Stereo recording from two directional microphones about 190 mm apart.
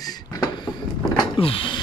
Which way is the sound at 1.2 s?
30° left (ahead or behind).